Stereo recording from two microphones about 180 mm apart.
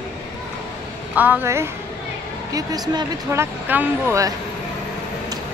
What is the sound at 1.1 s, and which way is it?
Speech, 10° right (ahead or behind).